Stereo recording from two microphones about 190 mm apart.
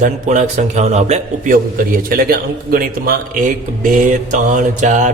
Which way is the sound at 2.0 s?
50° right (ahead or behind).